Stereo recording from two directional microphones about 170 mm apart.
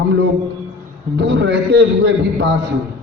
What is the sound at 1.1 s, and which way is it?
Speech, 90° right.